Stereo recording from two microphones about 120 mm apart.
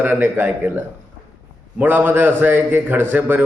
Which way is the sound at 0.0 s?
15° right (ahead or behind).